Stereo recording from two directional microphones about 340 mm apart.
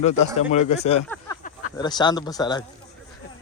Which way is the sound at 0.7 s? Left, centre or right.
Centre.